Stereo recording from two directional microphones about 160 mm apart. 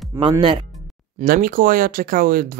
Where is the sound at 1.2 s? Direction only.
60° right (ahead or behind).